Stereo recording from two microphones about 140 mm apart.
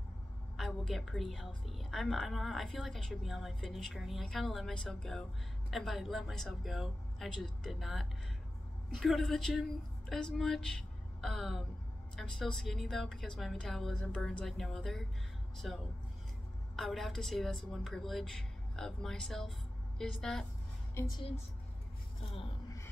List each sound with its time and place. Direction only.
0.6 s a woman's voice: centre (ahead or behind)
21.0 s a woman's voice: 20° left (ahead or behind)